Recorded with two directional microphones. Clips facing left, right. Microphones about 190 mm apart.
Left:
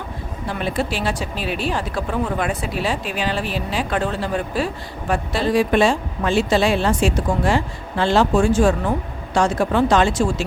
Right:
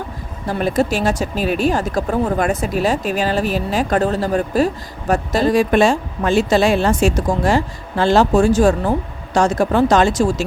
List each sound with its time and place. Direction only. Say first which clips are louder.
0.4 s speech: right 6 dB; 40° right (ahead or behind)